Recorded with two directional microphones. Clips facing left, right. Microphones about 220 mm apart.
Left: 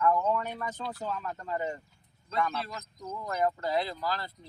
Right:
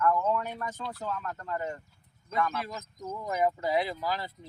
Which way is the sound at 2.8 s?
45° right (ahead or behind).